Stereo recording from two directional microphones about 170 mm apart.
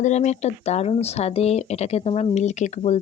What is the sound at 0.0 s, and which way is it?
Speech, 40° left (ahead or behind).